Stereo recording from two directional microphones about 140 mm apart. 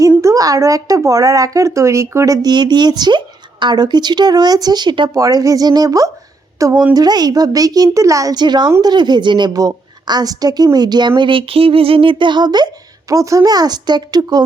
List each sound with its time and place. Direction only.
0.2 s speech: 25° right (ahead or behind)